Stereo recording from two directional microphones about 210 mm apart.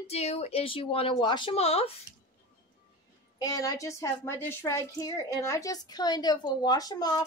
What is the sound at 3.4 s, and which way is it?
A woman's voice, 15° left (ahead or behind).